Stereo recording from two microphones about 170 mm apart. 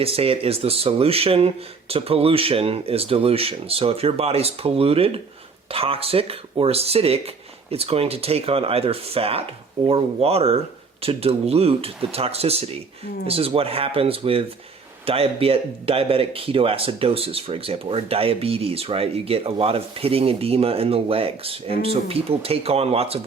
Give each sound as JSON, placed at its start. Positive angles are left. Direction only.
{"t": 0.0, "sound": "speech", "side_deg": -35}